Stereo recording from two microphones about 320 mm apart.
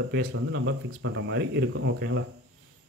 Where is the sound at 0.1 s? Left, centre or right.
Right.